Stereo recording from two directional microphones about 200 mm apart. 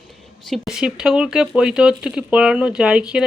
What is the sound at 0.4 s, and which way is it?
Speech, centre (ahead or behind).